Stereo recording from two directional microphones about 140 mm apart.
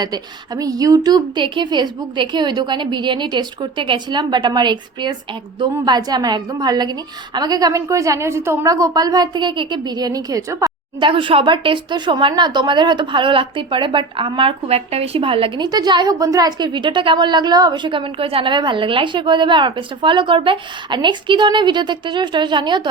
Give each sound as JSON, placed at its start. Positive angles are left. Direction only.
{"t": 0.0, "sound": "a woman's voice", "side_deg": -25}
{"t": 11.1, "sound": "speech", "side_deg": -40}